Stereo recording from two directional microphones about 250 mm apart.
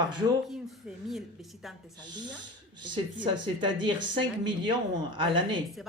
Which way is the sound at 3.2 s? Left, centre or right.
Centre.